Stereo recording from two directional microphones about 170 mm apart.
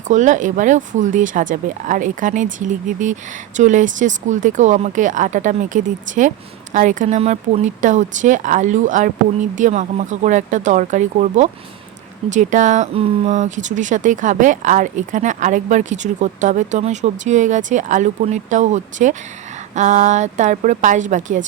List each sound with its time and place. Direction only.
0.1 s speech: 45° right (ahead or behind)